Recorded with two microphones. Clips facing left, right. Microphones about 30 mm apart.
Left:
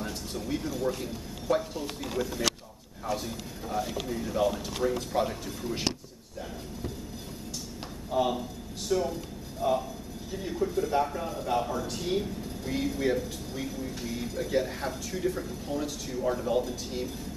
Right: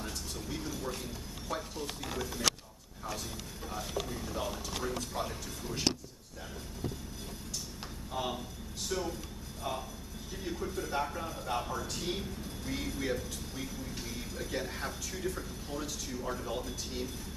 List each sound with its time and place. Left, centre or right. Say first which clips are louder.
0.0 s a sound: left 5 dB; centre
1.5 s speech: left 9 dB; centre
3.6 s speech: left 6 dB; centre
8.1 s a man's voice: left 9 dB; centre